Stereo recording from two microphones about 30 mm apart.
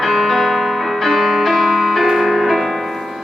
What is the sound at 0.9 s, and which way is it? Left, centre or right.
Music, centre.